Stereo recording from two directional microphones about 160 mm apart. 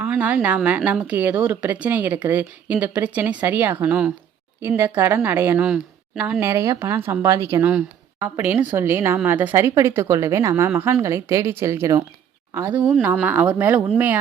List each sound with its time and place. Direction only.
0.0 s speech: 10° right (ahead or behind)
7.6 s speech: 5° right (ahead or behind)